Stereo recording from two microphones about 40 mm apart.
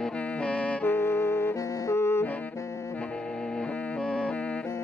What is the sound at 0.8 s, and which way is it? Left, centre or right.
Music, left.